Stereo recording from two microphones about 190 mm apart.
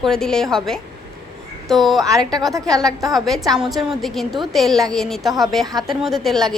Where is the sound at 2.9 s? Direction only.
20° right (ahead or behind).